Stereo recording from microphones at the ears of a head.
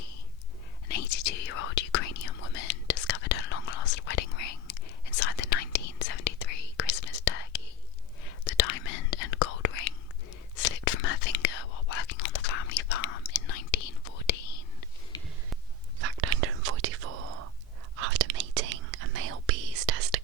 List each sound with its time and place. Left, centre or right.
0.9 s whispering: left
16.0 s whispering: right